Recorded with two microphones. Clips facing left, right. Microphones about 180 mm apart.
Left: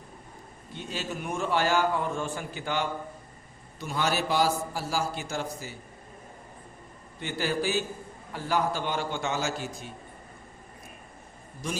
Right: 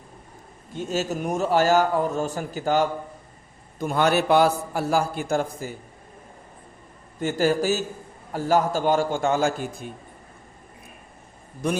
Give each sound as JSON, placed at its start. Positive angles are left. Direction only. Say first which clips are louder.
{"t": 0.7, "sound": "a man's voice", "louder": "right 9 dB", "side_deg": -45}
{"t": 3.8, "sound": "a man's voice", "louder": "right 8 dB", "side_deg": -55}
{"t": 7.2, "sound": "a man's voice", "louder": "right 8 dB", "side_deg": -45}
{"t": 11.6, "sound": "a man's voice", "louder": "right 9 dB", "side_deg": -60}